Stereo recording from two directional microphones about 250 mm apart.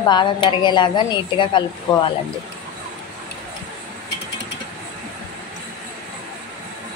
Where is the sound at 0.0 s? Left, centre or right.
Centre.